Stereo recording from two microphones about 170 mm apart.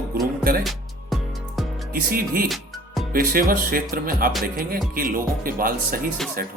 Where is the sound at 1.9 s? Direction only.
60° right (ahead or behind).